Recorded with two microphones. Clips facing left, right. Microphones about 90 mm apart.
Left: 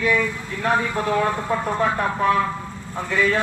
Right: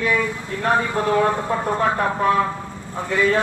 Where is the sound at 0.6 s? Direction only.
35° right (ahead or behind).